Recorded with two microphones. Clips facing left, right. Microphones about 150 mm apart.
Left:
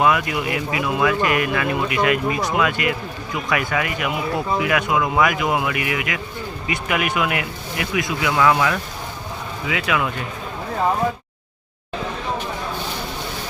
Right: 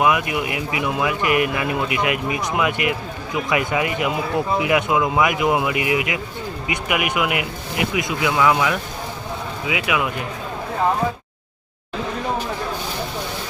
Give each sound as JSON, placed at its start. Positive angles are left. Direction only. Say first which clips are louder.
{"t": 0.0, "sound": "speech", "louder": "even", "side_deg": -15}